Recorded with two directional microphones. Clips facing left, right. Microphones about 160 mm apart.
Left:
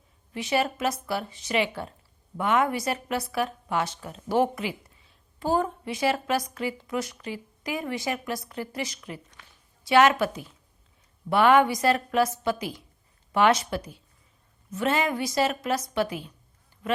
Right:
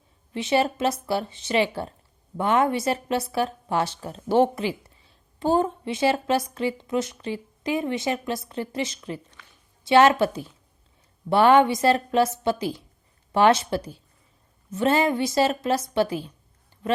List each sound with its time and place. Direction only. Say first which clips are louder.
0.3 s speech: right 4 dB; 25° right (ahead or behind)